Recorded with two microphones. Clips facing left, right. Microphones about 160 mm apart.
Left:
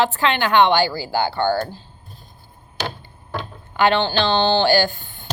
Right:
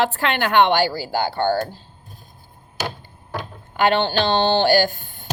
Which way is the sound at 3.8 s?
50° right (ahead or behind).